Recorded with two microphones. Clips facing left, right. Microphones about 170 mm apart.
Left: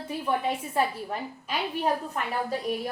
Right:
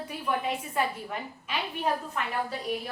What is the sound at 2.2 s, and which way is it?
Speech, 45° left (ahead or behind).